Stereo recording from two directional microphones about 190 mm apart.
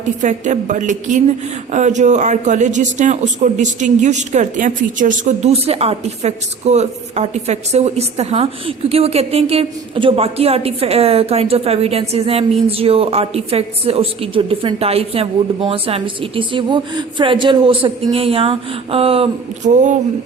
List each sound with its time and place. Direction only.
0.2 s speech: 40° right (ahead or behind)